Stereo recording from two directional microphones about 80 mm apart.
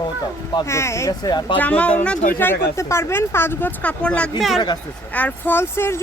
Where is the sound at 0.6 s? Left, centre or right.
Left.